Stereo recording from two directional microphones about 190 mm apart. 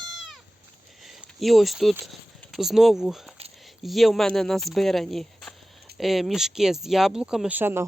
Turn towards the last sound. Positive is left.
turn(degrees=-10)  # may be behind; listen again after turning